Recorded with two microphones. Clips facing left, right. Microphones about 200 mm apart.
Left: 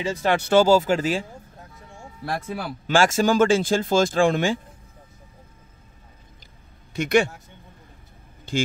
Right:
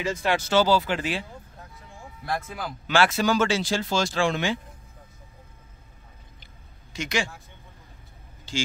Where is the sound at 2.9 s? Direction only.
45° left (ahead or behind).